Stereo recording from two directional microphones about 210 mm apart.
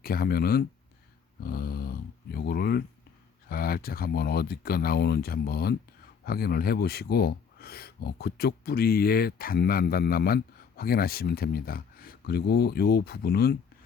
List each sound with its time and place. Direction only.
0.0 s speech: 45° left (ahead or behind)